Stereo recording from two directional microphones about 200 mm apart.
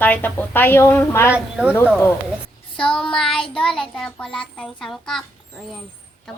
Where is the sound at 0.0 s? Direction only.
10° left (ahead or behind).